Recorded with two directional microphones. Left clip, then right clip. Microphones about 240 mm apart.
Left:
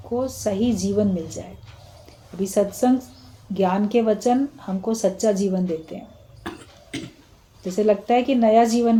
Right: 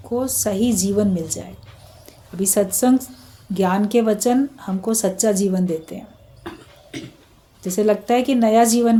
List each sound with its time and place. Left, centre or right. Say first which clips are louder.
0.1 s a woman's voice: right 2 dB; right
6.5 s a sound: even; left
6.9 s cough: left 1 dB; left
7.6 s a woman's voice: right 1 dB; right